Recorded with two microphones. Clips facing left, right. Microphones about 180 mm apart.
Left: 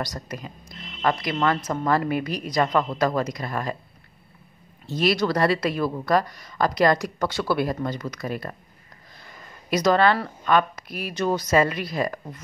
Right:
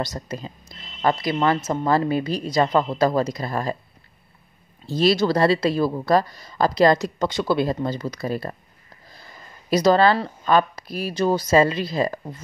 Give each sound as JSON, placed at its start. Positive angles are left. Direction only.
{"t": 0.0, "sound": "speech", "side_deg": -25}
{"t": 4.8, "sound": "speech", "side_deg": -30}
{"t": 9.7, "sound": "speech", "side_deg": -30}